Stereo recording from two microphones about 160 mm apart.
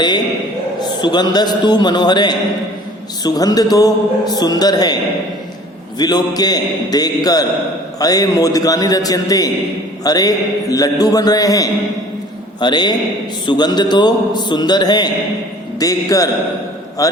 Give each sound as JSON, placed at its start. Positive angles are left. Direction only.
{"t": 0.8, "sound": "a man's voice", "side_deg": 25}
{"t": 6.0, "sound": "a man's voice", "side_deg": 25}